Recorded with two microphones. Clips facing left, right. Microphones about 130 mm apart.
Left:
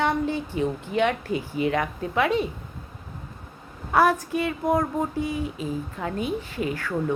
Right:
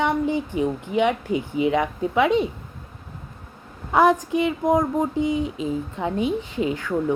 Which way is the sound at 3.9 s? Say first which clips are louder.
Right 3 dB; 15° right (ahead or behind).